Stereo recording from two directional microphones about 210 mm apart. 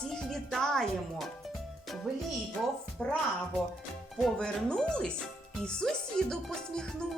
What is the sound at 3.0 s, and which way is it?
Speech, 5° left (ahead or behind).